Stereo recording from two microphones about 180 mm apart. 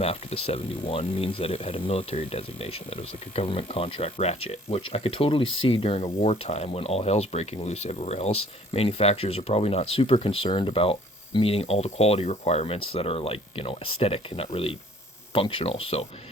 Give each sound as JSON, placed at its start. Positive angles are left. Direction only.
{"t": 0.0, "sound": "speech", "side_deg": 35}